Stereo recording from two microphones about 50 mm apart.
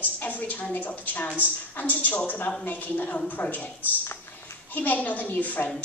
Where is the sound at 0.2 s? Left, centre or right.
Left.